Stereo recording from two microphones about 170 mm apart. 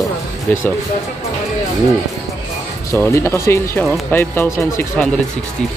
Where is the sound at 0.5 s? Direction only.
10° left (ahead or behind).